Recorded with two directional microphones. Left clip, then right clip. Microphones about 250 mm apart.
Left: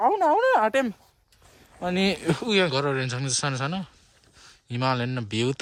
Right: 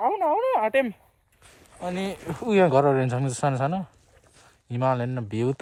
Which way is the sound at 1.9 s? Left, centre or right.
Left.